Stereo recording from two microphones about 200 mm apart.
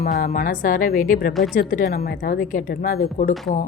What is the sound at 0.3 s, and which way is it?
A woman's voice, 40° left (ahead or behind).